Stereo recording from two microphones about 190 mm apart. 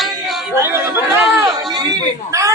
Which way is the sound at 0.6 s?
10° right (ahead or behind).